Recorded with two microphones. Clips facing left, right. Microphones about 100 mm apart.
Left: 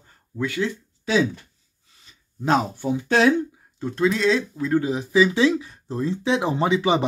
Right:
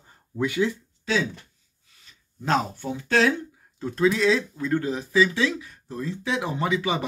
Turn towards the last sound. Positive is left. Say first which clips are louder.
# left 5 dB
turn(degrees=25)  # may be behind; listen again after turning